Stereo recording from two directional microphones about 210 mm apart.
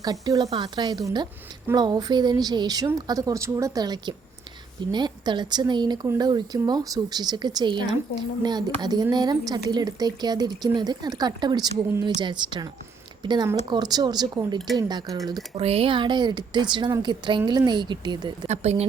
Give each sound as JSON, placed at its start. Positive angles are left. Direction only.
{"t": 0.0, "sound": "speech", "side_deg": -20}
{"t": 15.5, "sound": "speech", "side_deg": -30}
{"t": 18.4, "sound": "speech", "side_deg": -30}